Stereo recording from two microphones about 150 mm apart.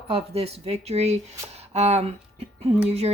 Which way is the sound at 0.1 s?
40° right (ahead or behind).